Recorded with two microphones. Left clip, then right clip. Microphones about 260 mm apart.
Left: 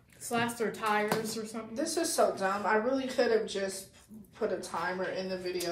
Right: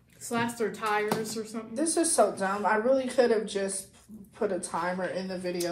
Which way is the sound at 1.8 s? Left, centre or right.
Right.